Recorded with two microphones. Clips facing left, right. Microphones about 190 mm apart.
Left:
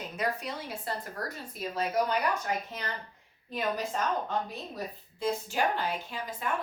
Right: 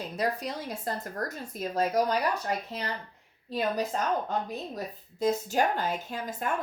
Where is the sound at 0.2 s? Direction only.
40° right (ahead or behind).